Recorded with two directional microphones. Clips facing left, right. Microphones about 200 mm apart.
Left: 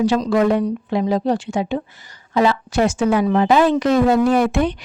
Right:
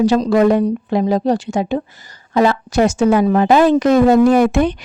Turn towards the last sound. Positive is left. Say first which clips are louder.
# right 4 dB
turn(degrees=-45)  # may be behind; listen again after turning